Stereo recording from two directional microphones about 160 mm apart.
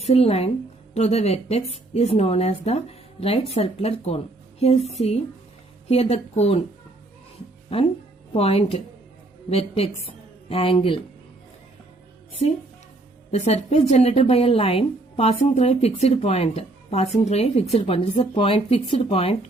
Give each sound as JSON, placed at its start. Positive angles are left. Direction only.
{"t": 0.0, "sound": "speech", "side_deg": 40}
{"t": 7.7, "sound": "a woman's voice", "side_deg": 35}
{"t": 13.3, "sound": "speech", "side_deg": 40}